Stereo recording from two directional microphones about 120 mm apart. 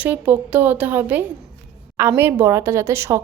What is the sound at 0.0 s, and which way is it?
Speech, 15° right (ahead or behind).